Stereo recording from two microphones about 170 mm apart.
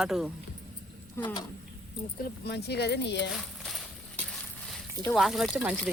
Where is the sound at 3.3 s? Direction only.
Centre (ahead or behind).